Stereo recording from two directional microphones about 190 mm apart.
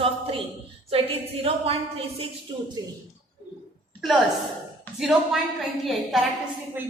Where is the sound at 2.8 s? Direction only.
20° right (ahead or behind).